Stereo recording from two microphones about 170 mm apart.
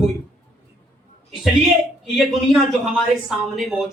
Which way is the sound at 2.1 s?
Centre (ahead or behind).